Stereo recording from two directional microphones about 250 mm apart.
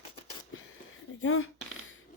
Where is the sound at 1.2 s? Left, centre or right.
Left.